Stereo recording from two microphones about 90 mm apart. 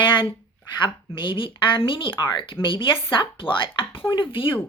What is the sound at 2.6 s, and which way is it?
Speech, 70° left (ahead or behind).